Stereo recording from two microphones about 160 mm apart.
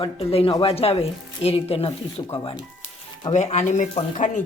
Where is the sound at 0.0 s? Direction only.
35° left (ahead or behind).